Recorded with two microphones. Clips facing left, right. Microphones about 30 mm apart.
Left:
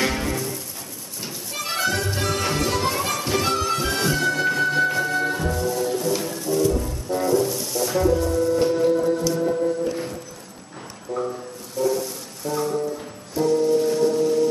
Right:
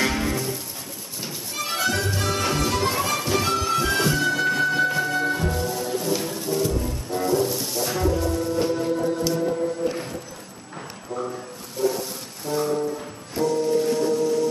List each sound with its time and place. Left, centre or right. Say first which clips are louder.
0.0 s music: even; centre
8.5 s music: left 5 dB; centre
11.1 s music: left 3 dB; centre
11.8 s music: left 2 dB; centre
13.4 s music: left 2 dB; centre
13.9 s singing bowl: left 2 dB; centre